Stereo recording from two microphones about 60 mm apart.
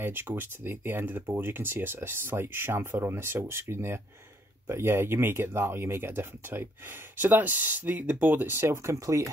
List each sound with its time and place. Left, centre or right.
0.0 s speech: right